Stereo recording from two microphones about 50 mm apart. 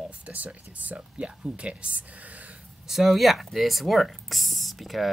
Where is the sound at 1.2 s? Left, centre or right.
Right.